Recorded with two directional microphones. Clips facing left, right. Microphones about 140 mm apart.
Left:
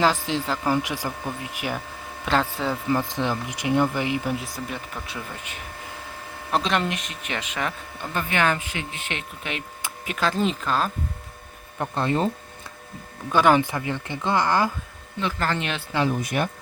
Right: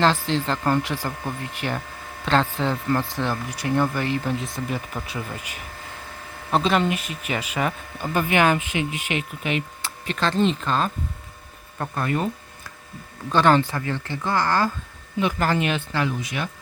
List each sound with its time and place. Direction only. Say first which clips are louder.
0.0 s speech: right 1 dB; 10° left (ahead or behind)
9.8 s speech: even; 10° left (ahead or behind)
11.8 s speech: left 2 dB; 25° left (ahead or behind)
13.3 s speech: even; 10° left (ahead or behind)
15.2 s speech: right 4 dB; 15° right (ahead or behind)
16.2 s speech: left 4 dB; 50° left (ahead or behind)